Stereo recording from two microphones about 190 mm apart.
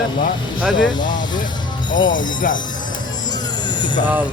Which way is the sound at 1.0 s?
45° left (ahead or behind).